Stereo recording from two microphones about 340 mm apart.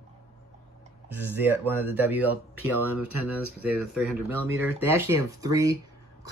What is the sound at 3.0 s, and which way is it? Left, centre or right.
Speech, right.